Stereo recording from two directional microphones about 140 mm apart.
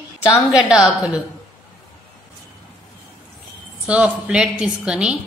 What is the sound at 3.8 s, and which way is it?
A woman's voice, 10° right (ahead or behind).